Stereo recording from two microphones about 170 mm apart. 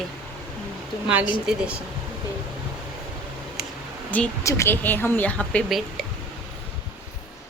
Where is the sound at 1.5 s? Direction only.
5° right (ahead or behind).